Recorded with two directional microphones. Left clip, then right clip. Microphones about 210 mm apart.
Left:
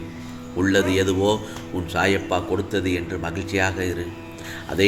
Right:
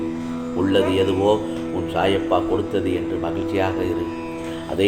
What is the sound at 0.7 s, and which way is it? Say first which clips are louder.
A man's voice: right 2 dB; 40° left (ahead or behind).